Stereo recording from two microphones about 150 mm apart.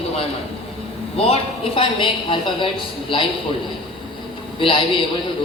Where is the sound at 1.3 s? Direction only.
35° left (ahead or behind).